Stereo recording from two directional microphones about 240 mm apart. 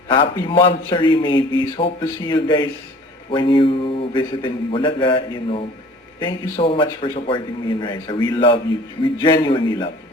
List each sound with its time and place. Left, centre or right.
0.1 s a man's voice: left